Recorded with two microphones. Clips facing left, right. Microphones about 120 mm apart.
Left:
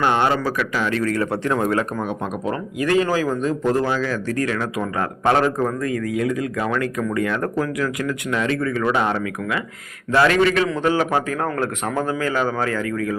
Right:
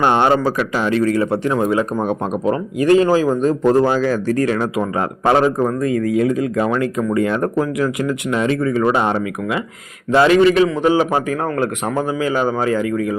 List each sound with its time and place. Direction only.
0.0 s speech: 30° right (ahead or behind); by 1.8 s 10° right (ahead or behind)
2.5 s speech: 25° right (ahead or behind)